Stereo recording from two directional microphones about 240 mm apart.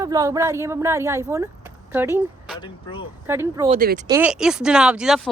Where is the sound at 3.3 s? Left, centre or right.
Centre.